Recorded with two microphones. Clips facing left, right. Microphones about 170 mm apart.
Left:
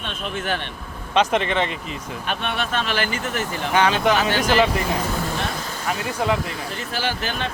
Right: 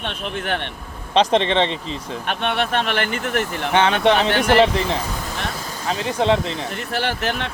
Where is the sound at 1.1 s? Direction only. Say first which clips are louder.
Right 3 dB; 30° right (ahead or behind).